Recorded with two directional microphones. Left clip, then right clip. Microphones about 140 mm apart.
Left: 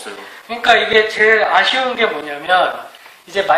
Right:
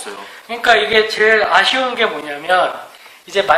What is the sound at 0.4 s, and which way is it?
A man's voice, 45° right (ahead or behind).